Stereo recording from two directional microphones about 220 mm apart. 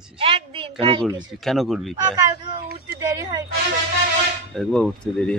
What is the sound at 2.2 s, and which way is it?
Speech, 15° right (ahead or behind).